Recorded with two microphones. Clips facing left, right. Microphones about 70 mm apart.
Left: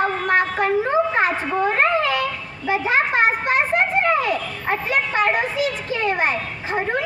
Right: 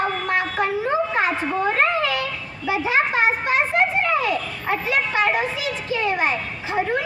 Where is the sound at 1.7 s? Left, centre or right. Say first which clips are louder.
Left 2 dB; left.